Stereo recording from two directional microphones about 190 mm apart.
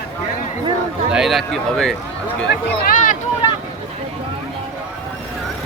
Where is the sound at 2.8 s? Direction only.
45° left (ahead or behind).